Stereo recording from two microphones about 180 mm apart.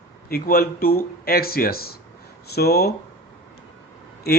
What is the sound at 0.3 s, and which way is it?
Speech, 55° left (ahead or behind).